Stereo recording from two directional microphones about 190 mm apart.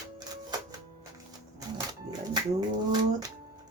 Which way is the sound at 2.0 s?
20° right (ahead or behind).